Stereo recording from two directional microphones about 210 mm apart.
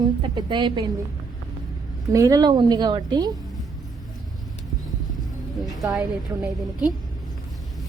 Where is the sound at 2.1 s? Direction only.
15° right (ahead or behind).